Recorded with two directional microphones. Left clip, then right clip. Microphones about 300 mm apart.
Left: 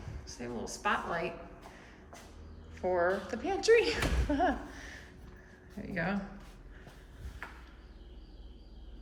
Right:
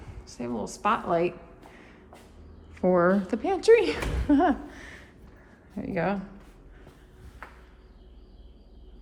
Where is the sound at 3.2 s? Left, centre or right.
Centre.